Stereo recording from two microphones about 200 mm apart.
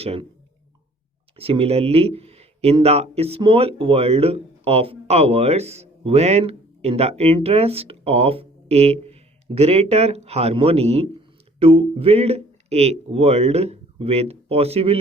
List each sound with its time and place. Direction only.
0.0 s speech: 30° right (ahead or behind)
1.4 s speech: 30° right (ahead or behind)